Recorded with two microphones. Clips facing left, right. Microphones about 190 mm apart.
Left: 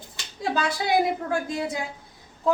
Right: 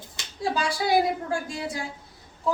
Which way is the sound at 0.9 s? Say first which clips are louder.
Even; 20° left (ahead or behind).